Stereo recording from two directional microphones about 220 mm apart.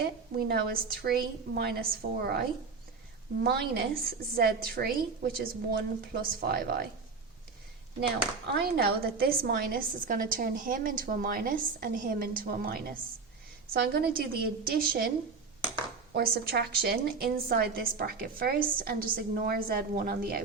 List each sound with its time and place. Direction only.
0.0 s a woman's voice: 45° right (ahead or behind)
3.4 s a woman's voice: 45° right (ahead or behind)
8.5 s a woman's voice: 45° right (ahead or behind)
16.1 s a woman's voice: 45° right (ahead or behind)